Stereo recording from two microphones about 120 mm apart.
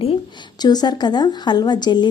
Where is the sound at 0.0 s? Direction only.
50° left (ahead or behind).